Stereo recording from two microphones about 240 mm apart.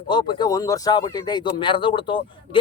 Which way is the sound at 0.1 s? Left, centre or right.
Centre.